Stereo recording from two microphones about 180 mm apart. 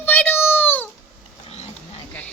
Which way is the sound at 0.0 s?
10° left (ahead or behind).